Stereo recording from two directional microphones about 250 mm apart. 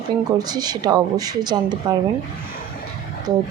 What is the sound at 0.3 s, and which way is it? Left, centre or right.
Speech, centre.